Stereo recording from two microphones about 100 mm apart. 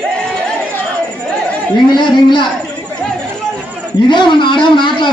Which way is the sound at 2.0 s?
50° left (ahead or behind).